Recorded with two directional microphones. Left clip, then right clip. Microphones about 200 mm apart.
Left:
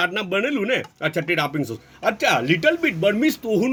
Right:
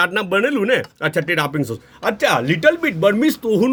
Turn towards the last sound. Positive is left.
turn(degrees=-60)  # may be behind; listen again after turning